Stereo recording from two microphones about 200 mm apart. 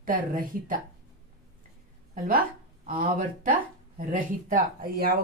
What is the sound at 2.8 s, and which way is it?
Speech, 45° right (ahead or behind).